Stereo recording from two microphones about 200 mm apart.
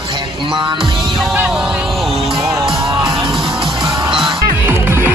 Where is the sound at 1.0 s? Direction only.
Centre (ahead or behind).